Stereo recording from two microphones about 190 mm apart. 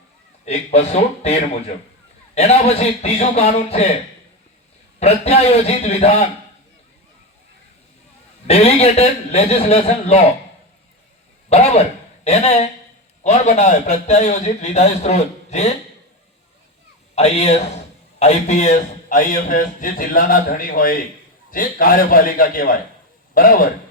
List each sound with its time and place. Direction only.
0.4 s a man's voice: 35° left (ahead or behind)
4.9 s a man's voice: 35° left (ahead or behind)
8.4 s a man's voice: 30° left (ahead or behind)
11.4 s speech: 35° left (ahead or behind)
13.2 s a man's voice: 35° left (ahead or behind)
17.2 s a man's voice: 35° left (ahead or behind)